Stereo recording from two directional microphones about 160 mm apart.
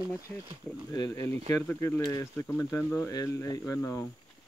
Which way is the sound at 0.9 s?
20° left (ahead or behind).